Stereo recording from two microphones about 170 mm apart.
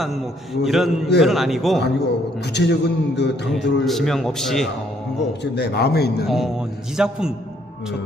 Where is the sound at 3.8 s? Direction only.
Centre (ahead or behind).